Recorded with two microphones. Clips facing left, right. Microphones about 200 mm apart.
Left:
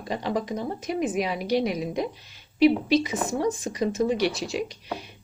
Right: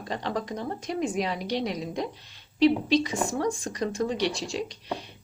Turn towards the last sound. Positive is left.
turn(degrees=5)  # may be behind; listen again after turning